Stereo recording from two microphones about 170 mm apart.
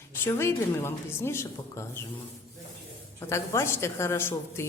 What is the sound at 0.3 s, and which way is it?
Speech, 15° left (ahead or behind).